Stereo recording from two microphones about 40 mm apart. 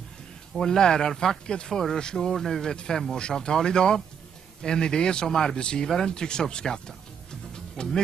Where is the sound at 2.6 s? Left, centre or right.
Centre.